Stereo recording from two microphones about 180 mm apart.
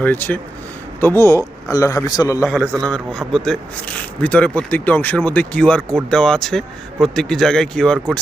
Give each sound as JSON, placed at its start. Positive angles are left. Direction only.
{"t": 0.0, "sound": "a man's voice", "side_deg": 10}
{"t": 2.4, "sound": "a man's voice", "side_deg": 0}